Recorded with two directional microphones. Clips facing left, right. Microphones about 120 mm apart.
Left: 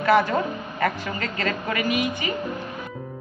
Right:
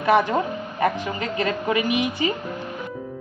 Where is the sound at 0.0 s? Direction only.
20° right (ahead or behind).